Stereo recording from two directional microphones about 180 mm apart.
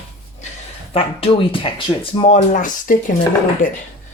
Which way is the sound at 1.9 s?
15° left (ahead or behind).